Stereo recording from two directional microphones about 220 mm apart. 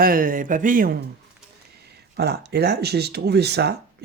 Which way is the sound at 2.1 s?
45° right (ahead or behind).